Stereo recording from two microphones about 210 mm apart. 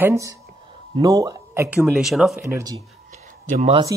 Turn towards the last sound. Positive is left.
turn(degrees=-30)  # may be behind; listen again after turning